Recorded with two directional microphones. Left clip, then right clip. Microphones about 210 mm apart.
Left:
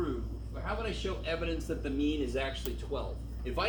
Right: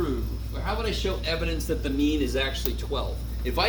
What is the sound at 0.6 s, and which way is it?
Speech, 50° right (ahead or behind).